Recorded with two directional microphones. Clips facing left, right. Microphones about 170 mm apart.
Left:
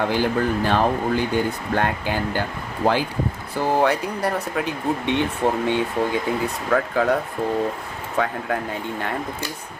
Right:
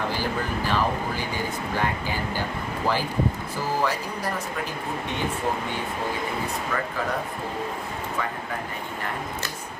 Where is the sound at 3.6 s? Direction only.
65° left (ahead or behind).